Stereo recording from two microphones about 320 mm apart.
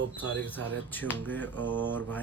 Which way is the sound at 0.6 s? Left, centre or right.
Centre.